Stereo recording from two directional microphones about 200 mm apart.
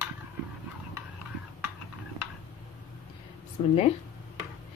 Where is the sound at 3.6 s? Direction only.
30° left (ahead or behind).